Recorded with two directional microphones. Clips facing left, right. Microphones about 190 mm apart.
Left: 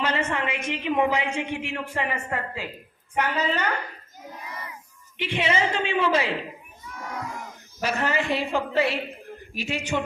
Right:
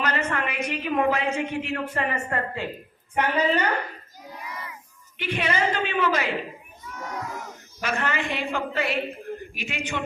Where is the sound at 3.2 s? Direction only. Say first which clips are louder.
Right 3 dB; 10° right (ahead or behind).